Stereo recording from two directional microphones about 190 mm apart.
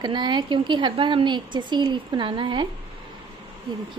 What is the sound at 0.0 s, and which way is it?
A woman's voice, 25° right (ahead or behind).